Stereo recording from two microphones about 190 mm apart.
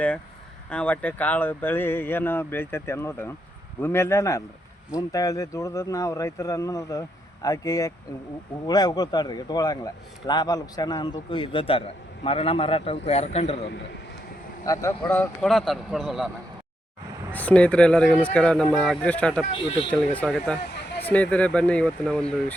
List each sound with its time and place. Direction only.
0.7 s a man's voice: 5° left (ahead or behind); by 13.7 s 35° left (ahead or behind)
14.6 s speech: 15° left (ahead or behind); by 16.3 s centre (ahead or behind)
17.3 s speech: 5° left (ahead or behind)
19.5 s a man's voice: 30° left (ahead or behind)
19.9 s speech: 5° left (ahead or behind)